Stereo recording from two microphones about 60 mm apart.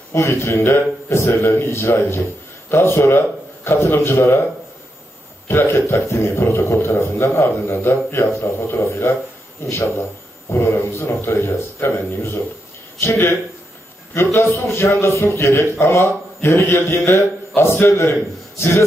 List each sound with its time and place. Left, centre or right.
0.3 s a man's voice: left
5.5 s a man's voice: left